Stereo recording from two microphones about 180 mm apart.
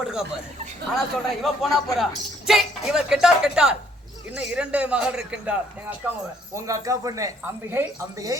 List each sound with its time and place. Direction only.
0.0 s speech: 5° right (ahead or behind)
6.5 s speech: 15° right (ahead or behind)